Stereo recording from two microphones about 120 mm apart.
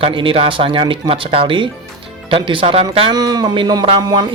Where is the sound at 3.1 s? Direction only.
35° right (ahead or behind).